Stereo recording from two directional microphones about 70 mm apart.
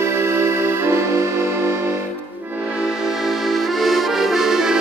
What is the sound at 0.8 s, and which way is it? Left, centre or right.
Music, right.